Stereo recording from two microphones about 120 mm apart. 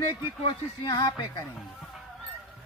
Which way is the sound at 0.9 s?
35° left (ahead or behind).